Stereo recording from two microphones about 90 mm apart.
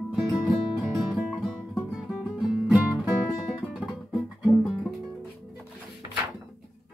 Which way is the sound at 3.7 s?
Centre (ahead or behind).